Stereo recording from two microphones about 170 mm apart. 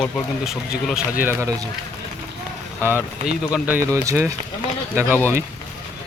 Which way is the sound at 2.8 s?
10° right (ahead or behind).